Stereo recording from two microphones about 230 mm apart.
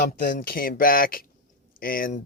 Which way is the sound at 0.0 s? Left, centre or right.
Left.